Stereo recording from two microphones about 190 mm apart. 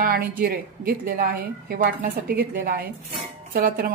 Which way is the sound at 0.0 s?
50° right (ahead or behind).